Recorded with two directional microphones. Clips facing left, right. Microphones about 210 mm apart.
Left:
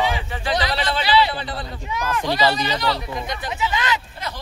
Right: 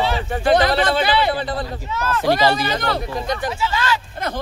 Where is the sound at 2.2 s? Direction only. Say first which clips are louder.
Right 4 dB; 50° right (ahead or behind).